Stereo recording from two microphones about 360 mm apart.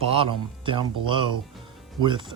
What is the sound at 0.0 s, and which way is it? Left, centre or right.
Speech, centre.